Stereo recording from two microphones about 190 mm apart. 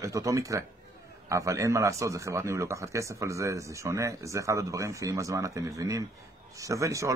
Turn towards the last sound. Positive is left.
turn(degrees=-15)  # may be behind; listen again after turning